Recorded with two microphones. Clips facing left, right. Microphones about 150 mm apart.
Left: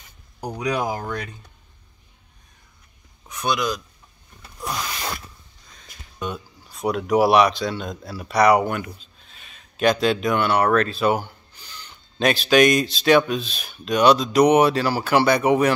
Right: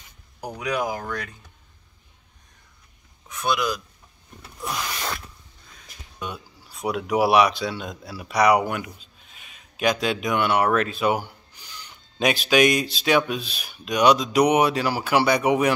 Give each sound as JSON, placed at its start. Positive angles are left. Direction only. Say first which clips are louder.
{"t": 0.6, "sound": "speech", "louder": "left 2 dB", "side_deg": 30}
{"t": 3.4, "sound": "speech", "louder": "left 1 dB", "side_deg": -5}
{"t": 4.6, "sound": "a sound", "louder": "left 1 dB", "side_deg": 5}
{"t": 5.7, "sound": "speech", "louder": "even", "side_deg": -5}